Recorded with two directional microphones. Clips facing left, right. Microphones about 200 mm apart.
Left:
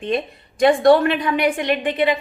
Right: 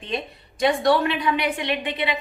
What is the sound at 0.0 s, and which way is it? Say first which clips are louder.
A woman's voice: left 7 dB; 55° left (ahead or behind).